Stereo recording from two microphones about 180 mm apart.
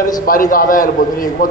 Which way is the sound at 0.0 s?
50° left (ahead or behind).